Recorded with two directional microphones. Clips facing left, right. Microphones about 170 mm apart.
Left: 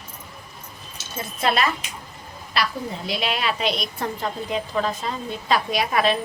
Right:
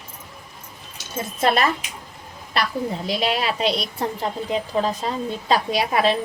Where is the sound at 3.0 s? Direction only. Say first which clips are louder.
Right 1 dB; 35° right (ahead or behind).